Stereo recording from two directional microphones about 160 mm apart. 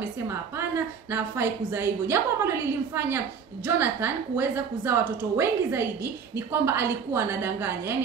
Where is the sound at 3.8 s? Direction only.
15° right (ahead or behind).